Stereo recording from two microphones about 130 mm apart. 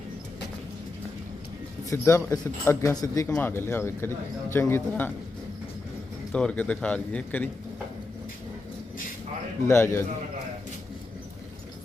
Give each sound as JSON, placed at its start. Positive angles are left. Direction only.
{"t": 1.9, "sound": "speech", "side_deg": 20}
{"t": 3.2, "sound": "a man's voice", "side_deg": 10}
{"t": 3.5, "sound": "a man's voice", "side_deg": 20}
{"t": 6.3, "sound": "a man's voice", "side_deg": 10}
{"t": 9.6, "sound": "speech", "side_deg": 20}